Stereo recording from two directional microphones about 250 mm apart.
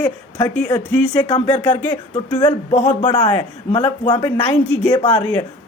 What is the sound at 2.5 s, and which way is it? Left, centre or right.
Speech, left.